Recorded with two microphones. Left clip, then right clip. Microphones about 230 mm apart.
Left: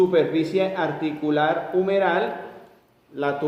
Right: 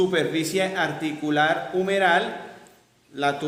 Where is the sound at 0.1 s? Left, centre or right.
Right.